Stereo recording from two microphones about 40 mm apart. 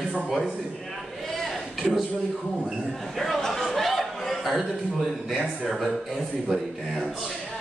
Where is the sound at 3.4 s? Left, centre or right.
Centre.